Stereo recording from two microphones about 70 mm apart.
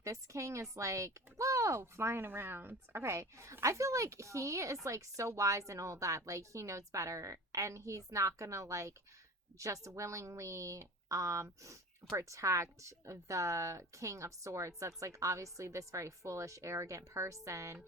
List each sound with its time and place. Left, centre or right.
0.0 s speech: right